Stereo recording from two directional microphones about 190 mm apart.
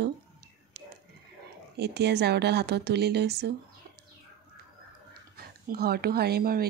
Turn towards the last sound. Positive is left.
turn(degrees=-55)  # may be behind; listen again after turning